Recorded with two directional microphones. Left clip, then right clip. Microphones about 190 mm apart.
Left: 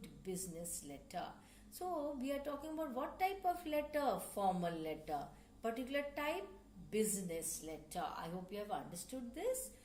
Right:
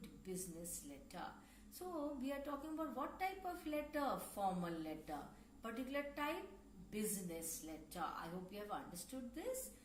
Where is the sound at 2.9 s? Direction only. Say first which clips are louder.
Left 7 dB; 50° left (ahead or behind).